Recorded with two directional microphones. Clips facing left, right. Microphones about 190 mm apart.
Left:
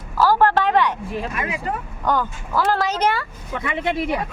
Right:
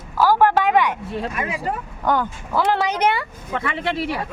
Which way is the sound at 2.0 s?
15° right (ahead or behind).